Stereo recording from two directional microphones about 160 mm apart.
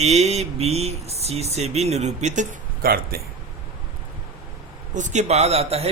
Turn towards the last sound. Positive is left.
turn(degrees=-40)  # may be behind; listen again after turning